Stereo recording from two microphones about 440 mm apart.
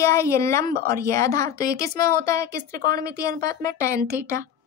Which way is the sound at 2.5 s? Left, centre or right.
Right.